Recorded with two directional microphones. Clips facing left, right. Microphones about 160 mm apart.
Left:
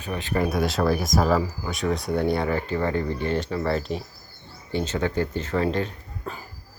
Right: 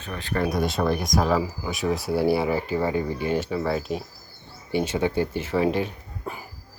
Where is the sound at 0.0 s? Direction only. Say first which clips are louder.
Left 3 dB; 15° left (ahead or behind).